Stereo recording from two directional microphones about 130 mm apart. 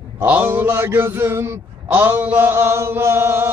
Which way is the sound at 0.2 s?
15° right (ahead or behind).